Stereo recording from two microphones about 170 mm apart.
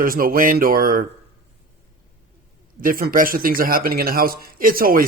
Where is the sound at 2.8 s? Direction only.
55° right (ahead or behind).